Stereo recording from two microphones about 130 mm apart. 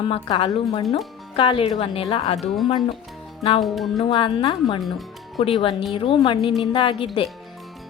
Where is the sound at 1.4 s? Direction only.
45° left (ahead or behind).